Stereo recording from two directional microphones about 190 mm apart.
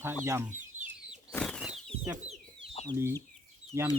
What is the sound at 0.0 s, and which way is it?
Speech, 10° right (ahead or behind).